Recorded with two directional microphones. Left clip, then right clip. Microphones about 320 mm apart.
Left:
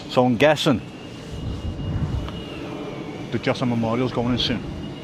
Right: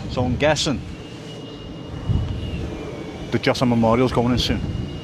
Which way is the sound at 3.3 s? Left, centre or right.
Centre.